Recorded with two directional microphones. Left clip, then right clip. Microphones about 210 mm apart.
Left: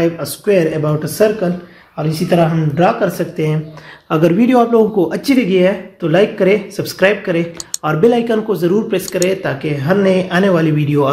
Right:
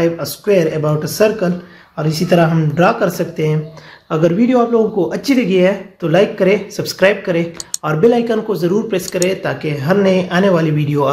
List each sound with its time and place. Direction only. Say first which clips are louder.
0.0 s speech: even; 5° right (ahead or behind)
4.1 s speech: left 1 dB; 15° left (ahead or behind)
4.9 s speech: left 1 dB; 5° left (ahead or behind)